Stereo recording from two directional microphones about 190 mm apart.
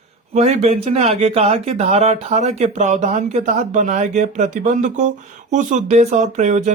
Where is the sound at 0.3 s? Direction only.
35° right (ahead or behind).